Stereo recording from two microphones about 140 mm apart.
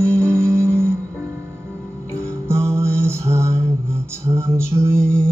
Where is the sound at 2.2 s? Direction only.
20° right (ahead or behind).